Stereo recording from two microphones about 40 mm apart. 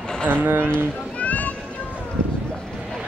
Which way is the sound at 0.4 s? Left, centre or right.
Right.